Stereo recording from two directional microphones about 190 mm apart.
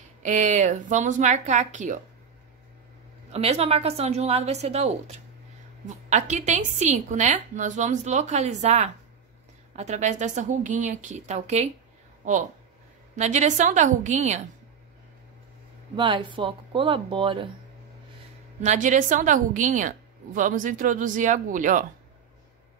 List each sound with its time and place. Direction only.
0.2 s a woman's voice: 40° right (ahead or behind)
3.3 s a woman's voice: 35° right (ahead or behind)
13.1 s a woman's voice: 40° right (ahead or behind)
16.0 s speech: 25° right (ahead or behind)
18.6 s a woman's voice: 40° right (ahead or behind)